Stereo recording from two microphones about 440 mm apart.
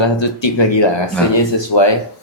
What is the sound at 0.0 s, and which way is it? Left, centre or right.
Speech, left.